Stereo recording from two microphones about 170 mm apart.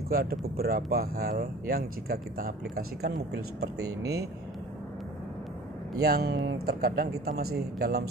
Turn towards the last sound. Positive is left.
turn(degrees=-65)  # may be behind; listen again after turning